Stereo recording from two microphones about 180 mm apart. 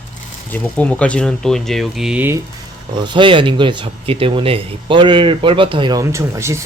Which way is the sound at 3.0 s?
25° right (ahead or behind).